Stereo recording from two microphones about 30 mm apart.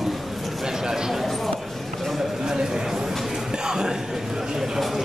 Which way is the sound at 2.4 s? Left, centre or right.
Centre.